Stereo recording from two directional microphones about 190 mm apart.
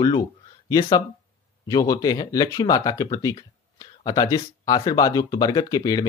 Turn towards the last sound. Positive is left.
turn(degrees=20)  # may be behind; listen again after turning